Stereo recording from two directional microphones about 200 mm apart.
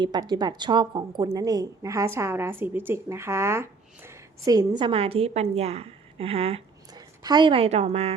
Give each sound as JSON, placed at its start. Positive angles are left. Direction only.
{"t": 0.0, "sound": "a woman's voice", "side_deg": -20}
{"t": 4.8, "sound": "a woman's voice", "side_deg": -25}